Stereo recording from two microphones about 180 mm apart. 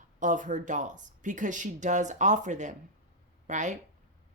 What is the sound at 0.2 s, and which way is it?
Speech, 45° right (ahead or behind).